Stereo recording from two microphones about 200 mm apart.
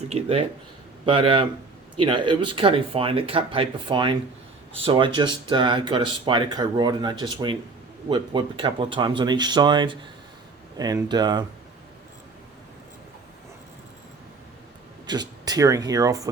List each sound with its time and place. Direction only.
0.1 s speech: 30° right (ahead or behind)
15.0 s speech: 20° right (ahead or behind)